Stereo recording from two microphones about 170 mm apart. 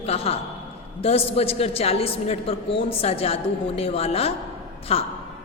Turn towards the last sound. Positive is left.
turn(degrees=35)  # may be behind; listen again after turning